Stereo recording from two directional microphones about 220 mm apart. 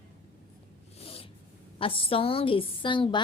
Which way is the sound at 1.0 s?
25° left (ahead or behind).